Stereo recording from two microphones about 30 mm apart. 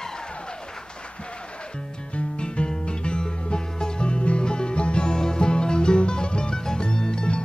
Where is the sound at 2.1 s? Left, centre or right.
Left.